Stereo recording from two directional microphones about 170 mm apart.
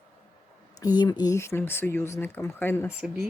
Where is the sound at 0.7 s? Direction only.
25° left (ahead or behind).